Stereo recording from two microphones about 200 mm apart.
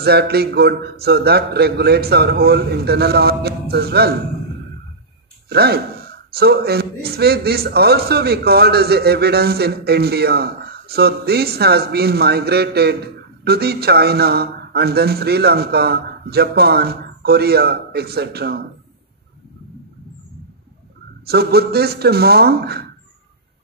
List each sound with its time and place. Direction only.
0.0 s a man's voice: 55° right (ahead or behind)
5.5 s a man's voice: 55° right (ahead or behind)
21.3 s a man's voice: 50° right (ahead or behind)